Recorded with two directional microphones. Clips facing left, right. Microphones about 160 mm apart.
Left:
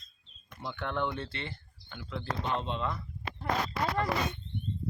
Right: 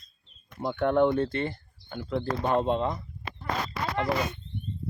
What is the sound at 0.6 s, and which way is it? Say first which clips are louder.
Speech: right 11 dB; 45° right (ahead or behind).